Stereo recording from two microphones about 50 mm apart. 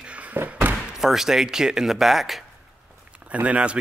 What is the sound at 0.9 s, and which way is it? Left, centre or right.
Speech, centre.